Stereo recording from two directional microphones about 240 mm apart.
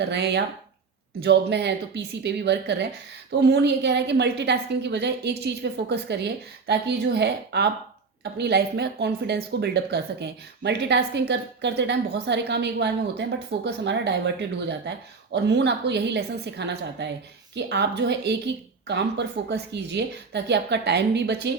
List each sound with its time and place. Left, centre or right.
0.0 s speech: right